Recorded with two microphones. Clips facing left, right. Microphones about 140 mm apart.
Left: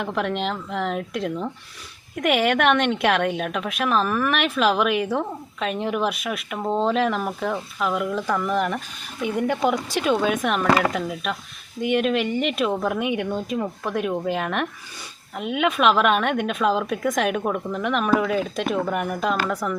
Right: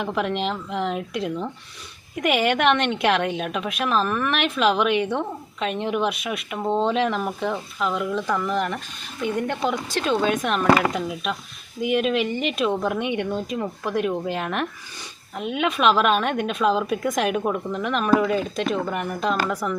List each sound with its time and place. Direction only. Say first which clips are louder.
0.0 s a woman's voice: even; centre (ahead or behind)